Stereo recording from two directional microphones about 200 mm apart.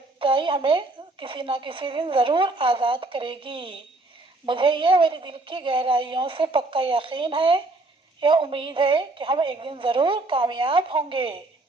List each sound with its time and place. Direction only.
0.2 s a woman's voice: 25° right (ahead or behind)